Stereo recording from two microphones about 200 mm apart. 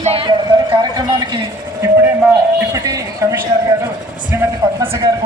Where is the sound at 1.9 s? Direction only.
10° right (ahead or behind).